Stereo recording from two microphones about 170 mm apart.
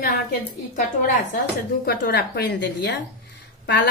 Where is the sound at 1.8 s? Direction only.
70° left (ahead or behind).